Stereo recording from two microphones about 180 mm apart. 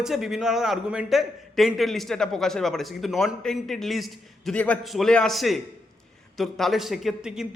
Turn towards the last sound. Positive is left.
turn(degrees=-5)  # may be behind; listen again after turning